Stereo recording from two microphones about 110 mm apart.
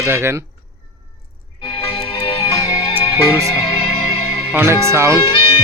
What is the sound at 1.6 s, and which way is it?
Music, 60° left (ahead or behind).